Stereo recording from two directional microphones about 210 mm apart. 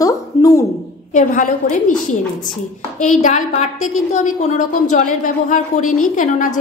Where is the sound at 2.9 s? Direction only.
35° left (ahead or behind).